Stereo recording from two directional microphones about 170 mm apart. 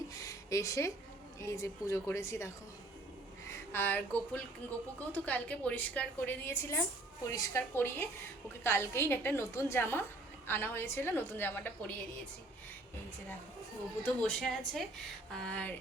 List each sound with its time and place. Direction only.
0.2 s a sound: 20° left (ahead or behind)
1.4 s a woman's voice: 15° left (ahead or behind)
14.0 s a woman's voice: 5° left (ahead or behind)